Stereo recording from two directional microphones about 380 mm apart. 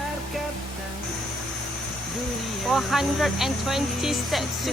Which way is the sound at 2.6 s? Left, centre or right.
Centre.